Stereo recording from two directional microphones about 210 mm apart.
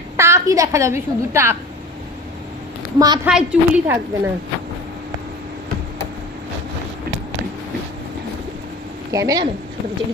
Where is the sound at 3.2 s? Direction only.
5° right (ahead or behind).